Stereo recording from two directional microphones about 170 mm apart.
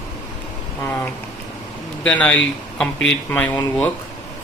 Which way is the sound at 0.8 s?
10° left (ahead or behind).